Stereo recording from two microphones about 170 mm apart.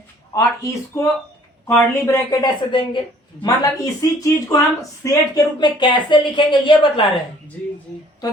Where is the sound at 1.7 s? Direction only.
15° left (ahead or behind).